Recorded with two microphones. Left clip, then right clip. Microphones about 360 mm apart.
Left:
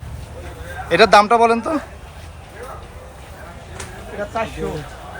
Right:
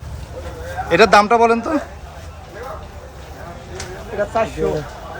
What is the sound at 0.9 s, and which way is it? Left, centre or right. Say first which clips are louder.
Speech: even; centre.